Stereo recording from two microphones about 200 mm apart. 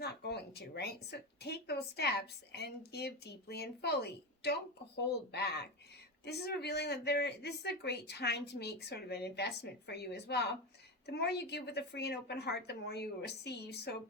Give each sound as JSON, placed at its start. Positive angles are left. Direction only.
{"t": 0.0, "sound": "a woman's voice", "side_deg": 55}